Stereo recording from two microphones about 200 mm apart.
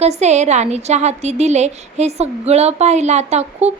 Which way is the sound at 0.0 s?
35° right (ahead or behind).